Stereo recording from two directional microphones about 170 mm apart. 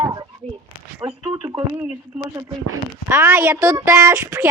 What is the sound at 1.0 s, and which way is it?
Speech, 30° right (ahead or behind).